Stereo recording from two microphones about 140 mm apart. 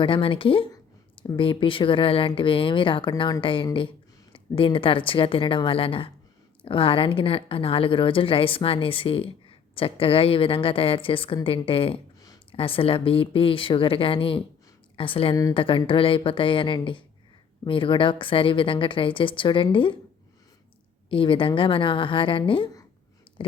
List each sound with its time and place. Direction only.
0.0 s a woman's voice: 40° left (ahead or behind)
21.1 s speech: 40° left (ahead or behind)